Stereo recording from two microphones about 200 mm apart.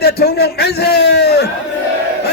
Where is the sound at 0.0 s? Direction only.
50° left (ahead or behind).